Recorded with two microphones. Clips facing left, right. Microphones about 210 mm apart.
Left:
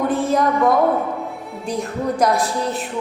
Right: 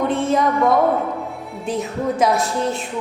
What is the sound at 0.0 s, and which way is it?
A woman's voice, centre (ahead or behind).